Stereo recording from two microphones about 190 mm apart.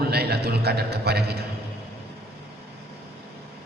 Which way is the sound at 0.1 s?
60° right (ahead or behind).